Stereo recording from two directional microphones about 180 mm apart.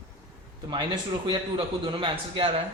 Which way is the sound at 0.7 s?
25° right (ahead or behind).